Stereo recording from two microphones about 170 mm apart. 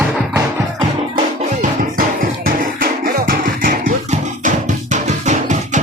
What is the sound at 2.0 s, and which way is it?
Music, 55° right (ahead or behind).